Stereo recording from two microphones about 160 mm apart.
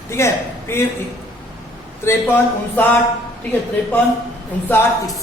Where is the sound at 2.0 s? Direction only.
10° left (ahead or behind).